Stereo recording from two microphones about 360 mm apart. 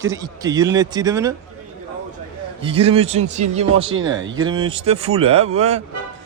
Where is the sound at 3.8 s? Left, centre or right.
Right.